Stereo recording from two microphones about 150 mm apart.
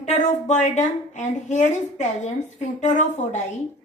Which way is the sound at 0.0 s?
50° left (ahead or behind).